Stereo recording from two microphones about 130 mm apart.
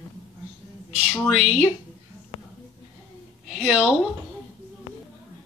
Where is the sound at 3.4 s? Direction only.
5° right (ahead or behind).